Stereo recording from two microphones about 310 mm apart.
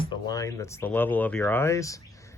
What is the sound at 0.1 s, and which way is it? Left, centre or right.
Speech, centre.